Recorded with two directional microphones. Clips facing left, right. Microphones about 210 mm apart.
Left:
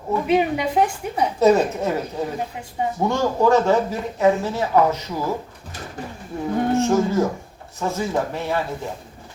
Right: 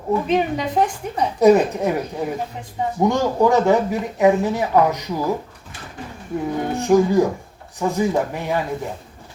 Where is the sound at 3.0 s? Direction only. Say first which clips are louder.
Right 2 dB; 15° right (ahead or behind).